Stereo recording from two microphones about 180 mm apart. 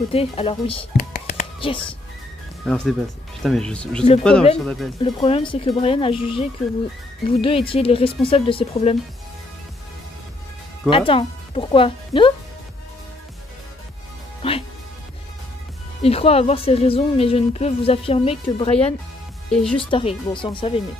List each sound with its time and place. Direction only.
0.1 s a woman's voice: 30° left (ahead or behind)
0.9 s a sound: 50° left (ahead or behind); by 2.0 s 30° left (ahead or behind)
2.6 s speech: 5° left (ahead or behind)
5.0 s a woman's voice: 25° left (ahead or behind)
10.9 s speech: 30° left (ahead or behind)
14.4 s speech: 30° left (ahead or behind)
16.0 s a woman's voice: 35° left (ahead or behind)
19.5 s speech: 5° left (ahead or behind)
19.8 s speech: 30° left (ahead or behind)